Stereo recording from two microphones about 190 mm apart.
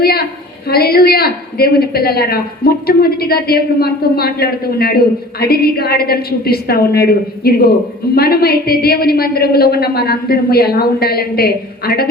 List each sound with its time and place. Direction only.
0.0 s a woman's voice: 55° left (ahead or behind)